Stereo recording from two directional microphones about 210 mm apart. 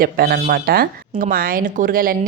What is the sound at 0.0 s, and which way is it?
Speech, 45° right (ahead or behind).